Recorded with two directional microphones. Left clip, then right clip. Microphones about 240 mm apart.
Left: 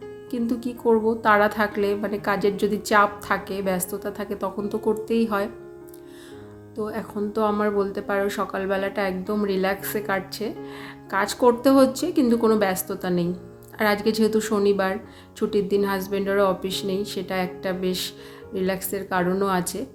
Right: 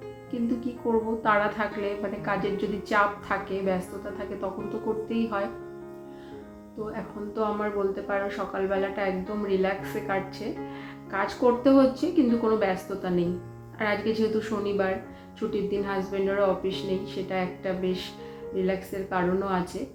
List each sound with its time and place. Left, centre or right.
0.3 s a woman's voice: left
6.8 s a woman's voice: left